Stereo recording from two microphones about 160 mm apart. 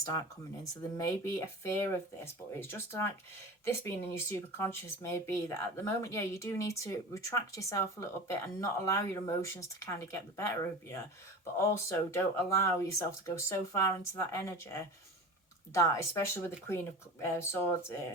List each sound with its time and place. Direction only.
0.6 s speech: 20° left (ahead or behind)